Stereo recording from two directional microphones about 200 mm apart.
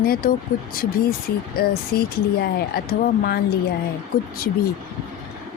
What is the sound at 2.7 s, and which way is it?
Speech, 50° left (ahead or behind).